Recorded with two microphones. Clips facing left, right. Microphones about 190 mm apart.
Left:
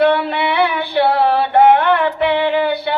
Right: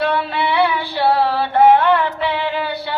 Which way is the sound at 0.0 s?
60° left (ahead or behind).